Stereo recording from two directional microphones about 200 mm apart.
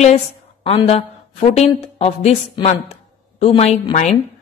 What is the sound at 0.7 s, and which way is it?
A woman's voice, 30° left (ahead or behind).